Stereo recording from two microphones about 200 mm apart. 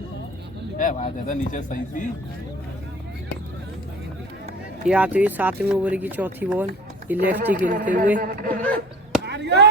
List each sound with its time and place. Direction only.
0.8 s speech: 40° left (ahead or behind)
4.9 s speech: 5° right (ahead or behind)
7.5 s a man's voice: 45° right (ahead or behind)
9.2 s speech: 60° right (ahead or behind)